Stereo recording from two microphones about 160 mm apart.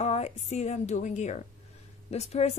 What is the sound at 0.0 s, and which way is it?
Speech, 40° left (ahead or behind).